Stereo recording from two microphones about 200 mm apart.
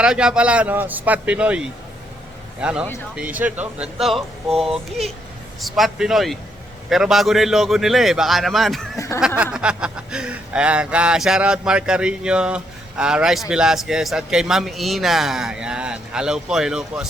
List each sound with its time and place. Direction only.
0.0 s a man's voice: 5° right (ahead or behind)
9.0 s a sound: 15° left (ahead or behind)
9.2 s speech: 5° right (ahead or behind)